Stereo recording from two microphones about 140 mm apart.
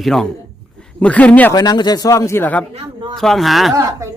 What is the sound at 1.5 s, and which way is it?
A man's voice, 30° left (ahead or behind).